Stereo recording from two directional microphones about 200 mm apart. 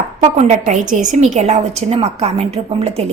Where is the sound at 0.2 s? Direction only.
35° right (ahead or behind).